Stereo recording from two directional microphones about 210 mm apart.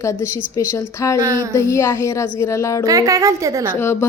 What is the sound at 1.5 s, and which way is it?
A woman's voice, 10° left (ahead or behind).